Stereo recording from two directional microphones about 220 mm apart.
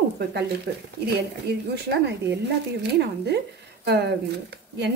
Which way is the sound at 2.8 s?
50° right (ahead or behind).